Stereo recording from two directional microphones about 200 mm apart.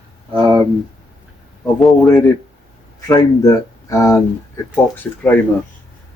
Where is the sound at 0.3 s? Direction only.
25° right (ahead or behind).